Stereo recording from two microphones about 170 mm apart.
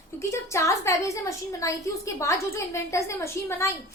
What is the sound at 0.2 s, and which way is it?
A woman's voice, 15° left (ahead or behind).